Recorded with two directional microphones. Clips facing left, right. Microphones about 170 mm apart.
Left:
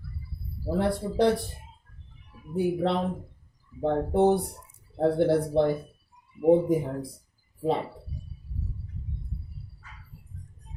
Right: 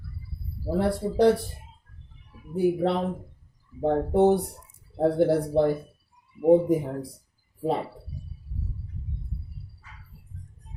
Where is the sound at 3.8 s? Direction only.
10° right (ahead or behind).